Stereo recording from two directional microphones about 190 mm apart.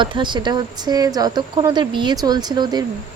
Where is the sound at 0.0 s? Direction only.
25° right (ahead or behind).